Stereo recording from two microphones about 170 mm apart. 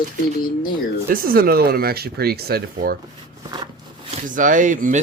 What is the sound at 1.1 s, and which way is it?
Speech, 55° right (ahead or behind).